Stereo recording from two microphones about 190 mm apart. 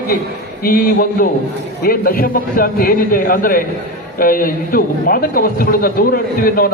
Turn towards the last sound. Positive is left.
turn(degrees=50)  # may be behind; listen again after turning